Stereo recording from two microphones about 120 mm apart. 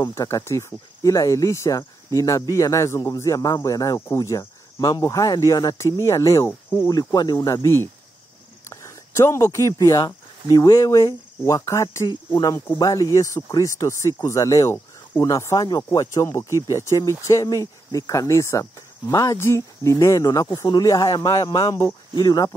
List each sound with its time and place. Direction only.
0.0 s speech: 30° left (ahead or behind)
6.9 s speech: 30° left (ahead or behind)